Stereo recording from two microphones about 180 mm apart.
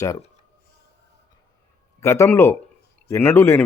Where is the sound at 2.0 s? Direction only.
15° left (ahead or behind).